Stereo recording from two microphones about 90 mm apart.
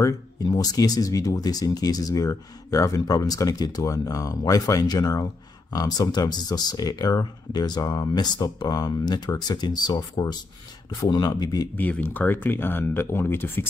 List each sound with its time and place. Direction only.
0.0 s speech: 45° left (ahead or behind)
11.7 s speech: 15° left (ahead or behind)